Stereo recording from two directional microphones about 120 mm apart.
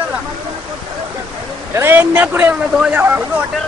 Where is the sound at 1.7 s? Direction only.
20° right (ahead or behind).